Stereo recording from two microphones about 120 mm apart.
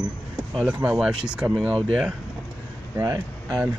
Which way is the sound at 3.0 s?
30° right (ahead or behind).